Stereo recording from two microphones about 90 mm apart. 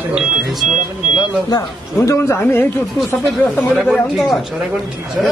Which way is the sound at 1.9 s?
30° left (ahead or behind).